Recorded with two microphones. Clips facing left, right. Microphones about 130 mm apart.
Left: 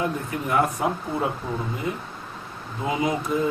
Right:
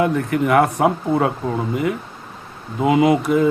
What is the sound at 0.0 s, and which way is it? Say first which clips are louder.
Speech: right 9 dB; 75° right (ahead or behind).